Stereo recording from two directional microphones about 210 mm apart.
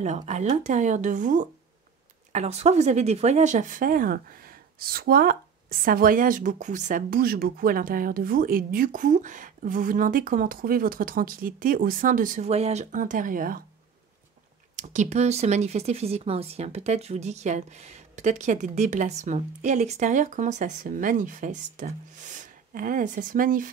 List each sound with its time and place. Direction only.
0.0 s speech: 35° right (ahead or behind)
14.8 s speech: 35° right (ahead or behind)